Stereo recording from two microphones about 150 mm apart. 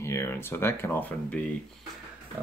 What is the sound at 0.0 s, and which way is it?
Speech, 20° left (ahead or behind).